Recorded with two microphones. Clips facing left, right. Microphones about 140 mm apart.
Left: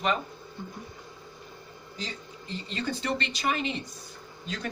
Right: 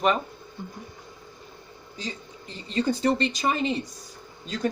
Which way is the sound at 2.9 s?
40° right (ahead or behind).